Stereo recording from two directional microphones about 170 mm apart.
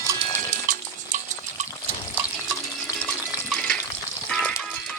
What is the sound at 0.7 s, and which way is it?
Stir, 50° right (ahead or behind).